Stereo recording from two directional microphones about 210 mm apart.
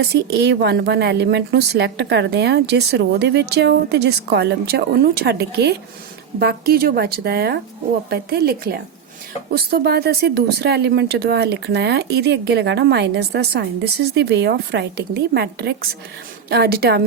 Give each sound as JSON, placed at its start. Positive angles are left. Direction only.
{"t": 0.0, "sound": "speech", "side_deg": -50}